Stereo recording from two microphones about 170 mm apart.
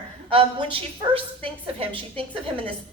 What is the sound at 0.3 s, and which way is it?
A woman's voice, 30° right (ahead or behind).